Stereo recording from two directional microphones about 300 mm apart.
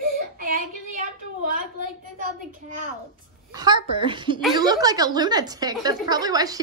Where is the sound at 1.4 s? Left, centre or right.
Right.